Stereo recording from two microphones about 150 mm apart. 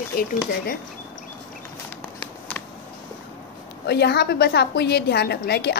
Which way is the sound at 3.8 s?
90° left.